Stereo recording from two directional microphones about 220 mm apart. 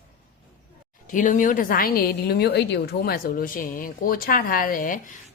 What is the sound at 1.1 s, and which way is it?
A woman's voice, 35° left (ahead or behind).